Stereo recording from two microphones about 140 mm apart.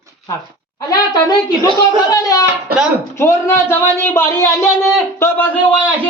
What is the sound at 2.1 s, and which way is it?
A man's voice, 25° left (ahead or behind).